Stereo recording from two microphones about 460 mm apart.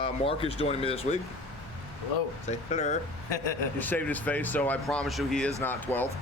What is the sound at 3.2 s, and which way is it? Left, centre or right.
Speech, left.